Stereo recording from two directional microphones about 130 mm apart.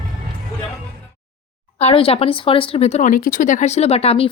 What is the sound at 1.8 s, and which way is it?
Speech, 50° left (ahead or behind).